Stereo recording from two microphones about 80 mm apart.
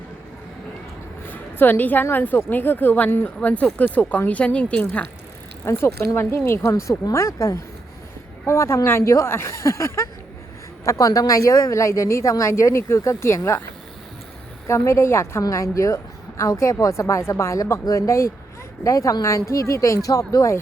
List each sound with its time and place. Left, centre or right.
1.3 s a woman's voice: left
5.6 s speech: left
10.8 s speech: left
14.7 s speech: left